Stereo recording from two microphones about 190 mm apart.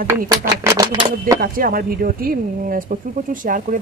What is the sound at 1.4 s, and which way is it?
Speech, 50° right (ahead or behind).